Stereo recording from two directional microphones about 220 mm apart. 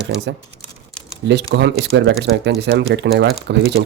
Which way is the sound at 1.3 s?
50° right (ahead or behind).